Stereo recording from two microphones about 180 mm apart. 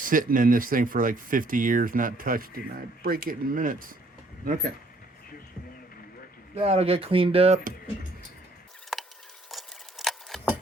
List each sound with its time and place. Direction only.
0.0 s speech: 50° right (ahead or behind)
6.6 s speech: 35° right (ahead or behind)
8.9 s a sound: centre (ahead or behind)